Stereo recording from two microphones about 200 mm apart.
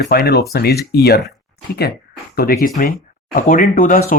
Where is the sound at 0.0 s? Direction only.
55° left (ahead or behind).